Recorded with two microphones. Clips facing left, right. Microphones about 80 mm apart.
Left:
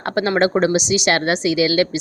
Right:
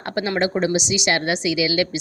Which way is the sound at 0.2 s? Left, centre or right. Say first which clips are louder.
Left 4 dB; left.